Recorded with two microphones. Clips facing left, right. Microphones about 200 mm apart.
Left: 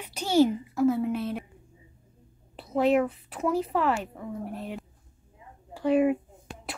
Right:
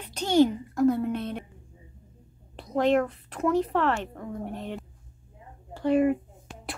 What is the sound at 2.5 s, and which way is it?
A woman's voice, 5° left (ahead or behind).